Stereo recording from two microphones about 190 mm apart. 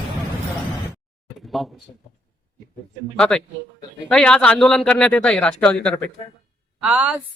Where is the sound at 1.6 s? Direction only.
Centre (ahead or behind).